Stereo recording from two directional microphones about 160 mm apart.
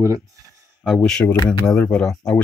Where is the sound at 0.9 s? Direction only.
5° left (ahead or behind).